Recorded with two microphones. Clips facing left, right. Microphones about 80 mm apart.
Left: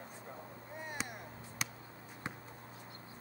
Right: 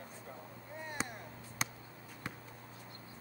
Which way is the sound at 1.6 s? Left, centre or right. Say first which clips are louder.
Right 3 dB; right.